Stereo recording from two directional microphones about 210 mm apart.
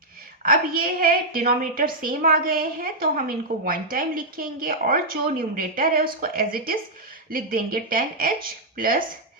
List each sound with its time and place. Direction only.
0.4 s a woman's voice: 45° right (ahead or behind)